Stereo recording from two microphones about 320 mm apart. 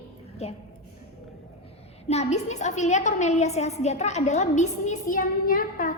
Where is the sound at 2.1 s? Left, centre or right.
Left.